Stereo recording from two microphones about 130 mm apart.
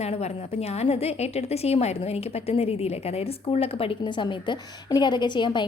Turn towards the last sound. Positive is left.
turn(degrees=35)  # may be behind; listen again after turning